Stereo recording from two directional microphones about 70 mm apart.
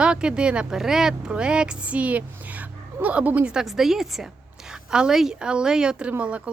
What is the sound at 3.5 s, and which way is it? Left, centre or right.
A woman's voice, centre.